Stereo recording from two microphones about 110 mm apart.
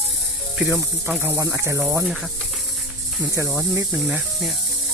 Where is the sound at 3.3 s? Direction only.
25° right (ahead or behind).